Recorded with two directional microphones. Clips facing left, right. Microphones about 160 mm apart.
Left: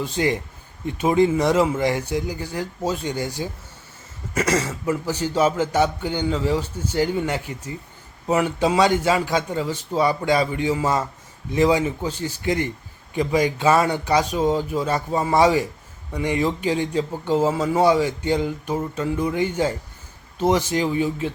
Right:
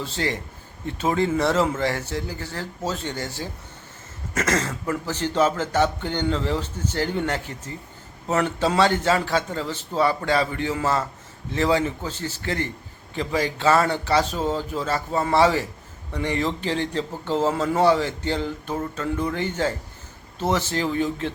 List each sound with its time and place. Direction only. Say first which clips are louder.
0.0 s a man's voice: left 5 dB; 15° left (ahead or behind)